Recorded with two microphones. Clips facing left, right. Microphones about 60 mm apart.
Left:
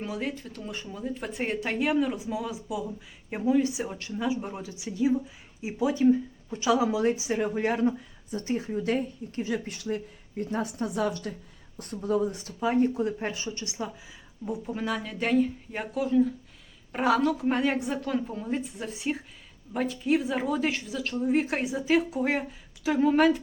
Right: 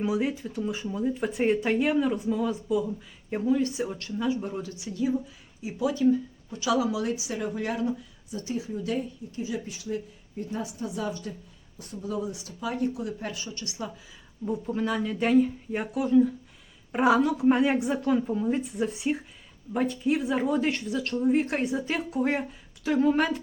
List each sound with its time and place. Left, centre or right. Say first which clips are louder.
0.0 s speech: right 5 dB; centre; by 11.3 s left
11.8 s speech: left 5 dB; left
14.4 s speech: right 3 dB; centre